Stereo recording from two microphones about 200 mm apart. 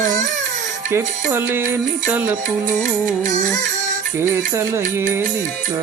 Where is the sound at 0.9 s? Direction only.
10° right (ahead or behind).